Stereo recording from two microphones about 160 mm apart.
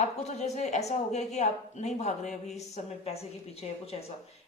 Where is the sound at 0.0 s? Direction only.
45° left (ahead or behind).